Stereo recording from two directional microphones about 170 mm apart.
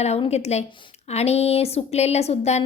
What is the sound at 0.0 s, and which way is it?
A woman's voice, 40° left (ahead or behind).